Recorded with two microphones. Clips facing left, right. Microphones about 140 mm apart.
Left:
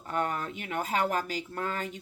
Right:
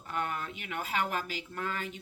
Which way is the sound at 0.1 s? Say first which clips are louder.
Left 4 dB; 40° left (ahead or behind).